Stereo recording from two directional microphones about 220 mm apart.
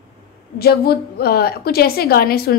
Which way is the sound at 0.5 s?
45° left (ahead or behind).